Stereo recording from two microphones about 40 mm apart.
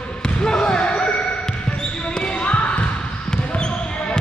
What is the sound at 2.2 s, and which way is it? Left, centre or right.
Basketball bounce, left.